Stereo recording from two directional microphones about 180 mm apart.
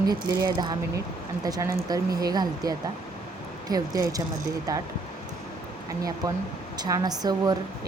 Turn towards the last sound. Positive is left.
turn(degrees=-20)  # may be behind; listen again after turning